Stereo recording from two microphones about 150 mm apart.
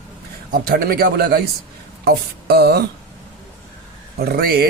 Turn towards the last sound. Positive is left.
turn(degrees=-90)